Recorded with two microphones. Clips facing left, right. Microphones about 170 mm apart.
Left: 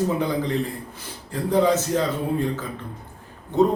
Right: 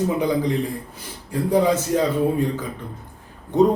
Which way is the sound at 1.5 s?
10° right (ahead or behind).